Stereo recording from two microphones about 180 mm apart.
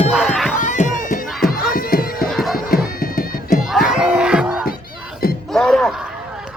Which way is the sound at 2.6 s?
55° left (ahead or behind).